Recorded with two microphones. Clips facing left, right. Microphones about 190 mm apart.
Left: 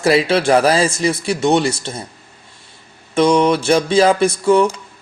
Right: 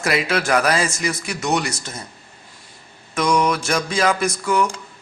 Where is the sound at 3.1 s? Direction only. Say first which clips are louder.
Left 6 dB; 30° left (ahead or behind).